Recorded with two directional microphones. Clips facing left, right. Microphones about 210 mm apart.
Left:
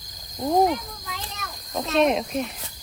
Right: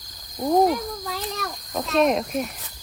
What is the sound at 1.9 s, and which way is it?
Speech, centre (ahead or behind).